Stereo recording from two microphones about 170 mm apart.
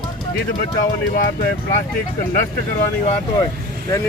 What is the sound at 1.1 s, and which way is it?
Speech, 55° left (ahead or behind).